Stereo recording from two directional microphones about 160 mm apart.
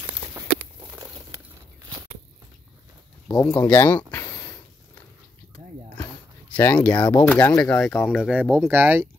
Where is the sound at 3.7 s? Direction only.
15° left (ahead or behind).